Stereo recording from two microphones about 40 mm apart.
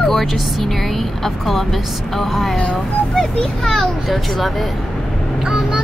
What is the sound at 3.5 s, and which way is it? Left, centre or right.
Speech, centre.